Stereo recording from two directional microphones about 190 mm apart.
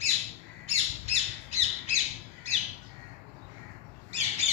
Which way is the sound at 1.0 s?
35° right (ahead or behind).